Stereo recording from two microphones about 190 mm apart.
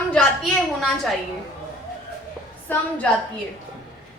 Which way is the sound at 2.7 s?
10° left (ahead or behind).